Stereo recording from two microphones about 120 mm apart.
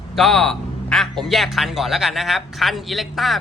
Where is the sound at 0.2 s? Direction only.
Centre (ahead or behind).